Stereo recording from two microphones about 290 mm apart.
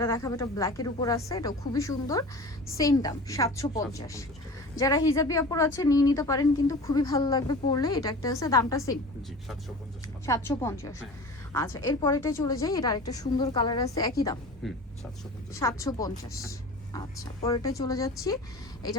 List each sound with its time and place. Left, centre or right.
0.0 s a woman's voice: centre
10.2 s a woman's voice: centre
14.6 s speech: centre
15.5 s a woman's voice: centre